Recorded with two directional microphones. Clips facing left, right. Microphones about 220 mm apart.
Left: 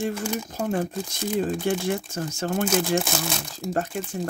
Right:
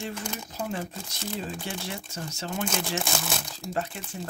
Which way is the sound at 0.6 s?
50° left (ahead or behind).